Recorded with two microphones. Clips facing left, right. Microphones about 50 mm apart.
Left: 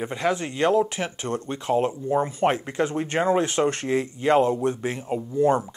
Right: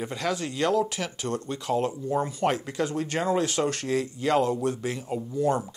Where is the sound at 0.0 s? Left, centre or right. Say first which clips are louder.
Left 4 dB; left.